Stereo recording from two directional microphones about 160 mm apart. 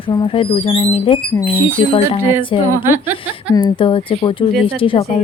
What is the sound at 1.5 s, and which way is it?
Speech, 10° right (ahead or behind).